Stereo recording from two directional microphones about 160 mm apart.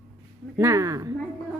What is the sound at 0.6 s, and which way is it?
Speech, 20° right (ahead or behind).